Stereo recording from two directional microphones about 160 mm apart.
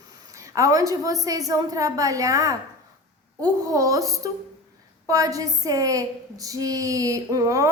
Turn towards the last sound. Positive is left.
turn(degrees=-20)  # may be behind; listen again after turning